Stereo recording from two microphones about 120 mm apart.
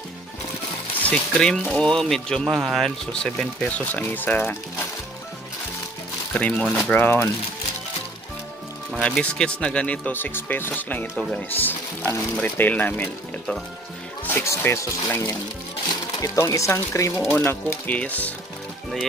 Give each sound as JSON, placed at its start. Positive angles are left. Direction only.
{"t": 1.0, "sound": "speech", "side_deg": 5}
{"t": 6.3, "sound": "speech", "side_deg": 10}
{"t": 7.0, "sound": "speech", "side_deg": 20}
{"t": 9.0, "sound": "speech", "side_deg": 10}